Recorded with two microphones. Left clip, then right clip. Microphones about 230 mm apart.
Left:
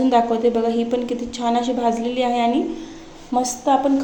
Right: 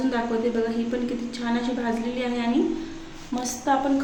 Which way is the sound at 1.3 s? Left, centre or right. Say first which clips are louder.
Left 7 dB; left.